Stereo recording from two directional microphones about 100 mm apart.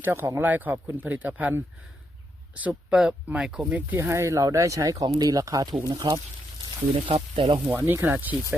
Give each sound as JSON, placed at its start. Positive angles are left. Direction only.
{"t": 0.0, "sound": "speech", "side_deg": -25}
{"t": 3.9, "sound": "speech", "side_deg": -30}
{"t": 5.9, "sound": "speech", "side_deg": -55}
{"t": 7.7, "sound": "speech", "side_deg": -20}